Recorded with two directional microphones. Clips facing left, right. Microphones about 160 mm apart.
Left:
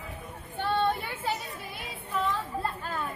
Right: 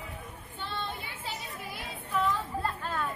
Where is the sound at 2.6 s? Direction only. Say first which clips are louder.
Even; 5° left (ahead or behind).